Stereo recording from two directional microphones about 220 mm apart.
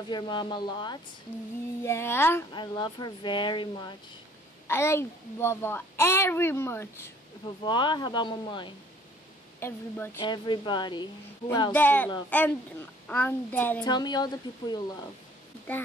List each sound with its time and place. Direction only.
0.1 s a woman's voice: 20° left (ahead or behind)
9.6 s a child's voice: 10° left (ahead or behind)
11.7 s a child's voice: 10° left (ahead or behind)
13.9 s a woman's voice: 20° left (ahead or behind)